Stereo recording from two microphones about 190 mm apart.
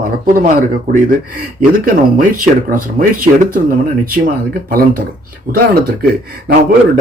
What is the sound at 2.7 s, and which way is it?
Speech, 50° right (ahead or behind).